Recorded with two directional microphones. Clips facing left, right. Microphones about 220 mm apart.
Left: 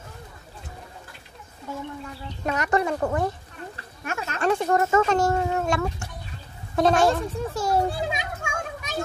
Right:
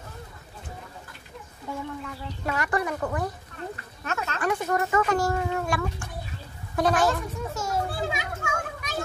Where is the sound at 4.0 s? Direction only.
15° left (ahead or behind).